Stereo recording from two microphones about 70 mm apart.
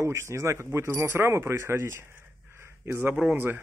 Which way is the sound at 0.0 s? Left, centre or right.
Right.